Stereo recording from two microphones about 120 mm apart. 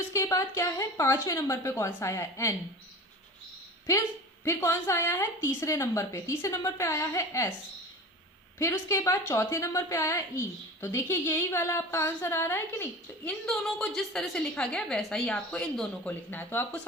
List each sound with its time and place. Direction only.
0.1 s a woman's voice: 25° left (ahead or behind)
4.4 s a woman's voice: 20° left (ahead or behind)
8.5 s a woman's voice: 25° left (ahead or behind)
13.4 s a woman's voice: centre (ahead or behind)
16.0 s speech: 15° left (ahead or behind)